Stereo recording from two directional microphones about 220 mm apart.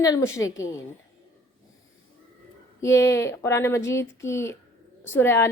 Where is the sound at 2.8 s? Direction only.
15° left (ahead or behind).